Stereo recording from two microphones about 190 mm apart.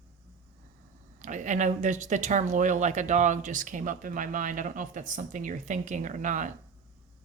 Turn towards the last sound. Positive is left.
turn(degrees=-40)  # may be behind; listen again after turning